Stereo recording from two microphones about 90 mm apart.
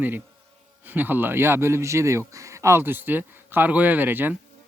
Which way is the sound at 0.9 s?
20° right (ahead or behind).